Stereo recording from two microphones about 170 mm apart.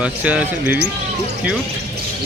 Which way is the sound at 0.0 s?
5° right (ahead or behind).